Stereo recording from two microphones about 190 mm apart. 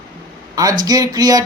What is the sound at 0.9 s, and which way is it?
Speech, 20° right (ahead or behind).